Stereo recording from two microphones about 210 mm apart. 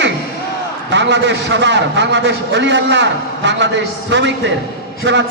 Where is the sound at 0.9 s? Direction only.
55° right (ahead or behind).